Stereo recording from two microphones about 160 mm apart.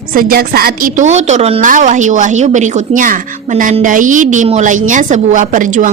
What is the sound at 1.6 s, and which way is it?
A woman's voice, 55° right (ahead or behind).